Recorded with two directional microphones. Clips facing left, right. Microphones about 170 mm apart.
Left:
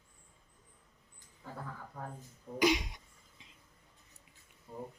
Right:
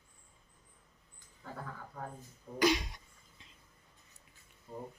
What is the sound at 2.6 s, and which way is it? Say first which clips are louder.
Cough: even; 15° left (ahead or behind).